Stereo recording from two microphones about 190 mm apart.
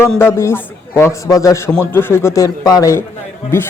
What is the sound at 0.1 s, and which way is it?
A man's voice, 10° left (ahead or behind).